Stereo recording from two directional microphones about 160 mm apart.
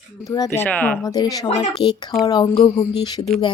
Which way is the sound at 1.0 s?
25° left (ahead or behind).